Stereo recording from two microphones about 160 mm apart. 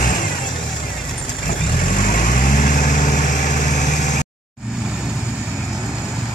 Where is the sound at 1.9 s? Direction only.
55° left (ahead or behind).